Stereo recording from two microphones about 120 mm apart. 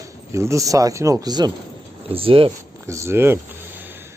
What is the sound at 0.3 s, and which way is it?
Speech, 25° right (ahead or behind).